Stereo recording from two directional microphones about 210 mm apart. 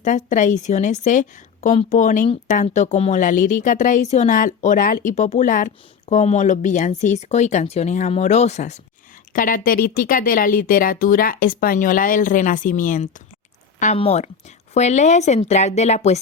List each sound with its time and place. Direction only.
0.0 s a woman's voice: 35° left (ahead or behind)